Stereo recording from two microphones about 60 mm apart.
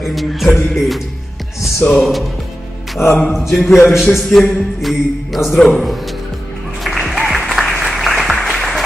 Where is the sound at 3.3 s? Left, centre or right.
Centre.